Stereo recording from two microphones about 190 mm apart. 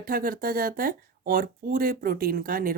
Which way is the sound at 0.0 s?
50° right (ahead or behind).